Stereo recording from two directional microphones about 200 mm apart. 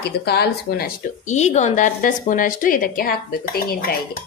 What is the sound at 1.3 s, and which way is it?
A woman's voice, 35° left (ahead or behind).